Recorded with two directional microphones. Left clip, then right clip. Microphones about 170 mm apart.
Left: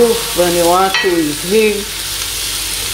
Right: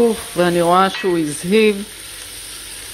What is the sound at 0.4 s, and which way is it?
Stir, 50° right (ahead or behind).